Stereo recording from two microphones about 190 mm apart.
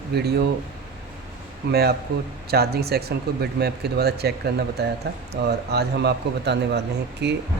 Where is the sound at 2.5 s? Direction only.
55° right (ahead or behind).